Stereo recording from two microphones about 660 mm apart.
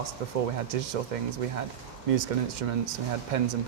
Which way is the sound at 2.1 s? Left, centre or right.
Right.